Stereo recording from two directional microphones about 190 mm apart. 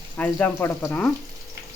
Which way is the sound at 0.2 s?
10° left (ahead or behind).